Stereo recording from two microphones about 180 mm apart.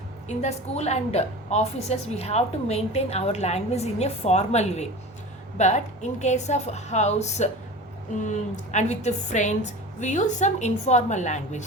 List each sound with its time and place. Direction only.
0.3 s a woman's voice: 35° left (ahead or behind)